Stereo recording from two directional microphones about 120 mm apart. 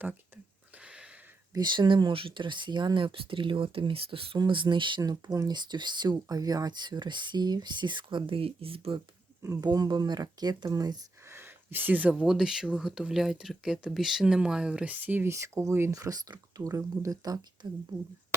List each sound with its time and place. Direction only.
0.8 s a sound: 10° right (ahead or behind)
1.5 s speech: 40° right (ahead or behind)
9.4 s speech: 25° right (ahead or behind)
9.6 s speech: 35° right (ahead or behind)
11.3 s a woman's voice: 20° right (ahead or behind)